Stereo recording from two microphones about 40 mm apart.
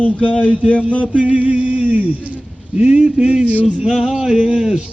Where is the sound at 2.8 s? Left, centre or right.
Right.